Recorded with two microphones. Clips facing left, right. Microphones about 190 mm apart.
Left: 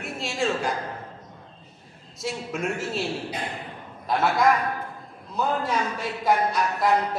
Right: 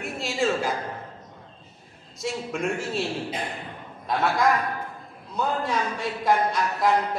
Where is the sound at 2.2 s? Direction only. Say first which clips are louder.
Right 1 dB; centre (ahead or behind).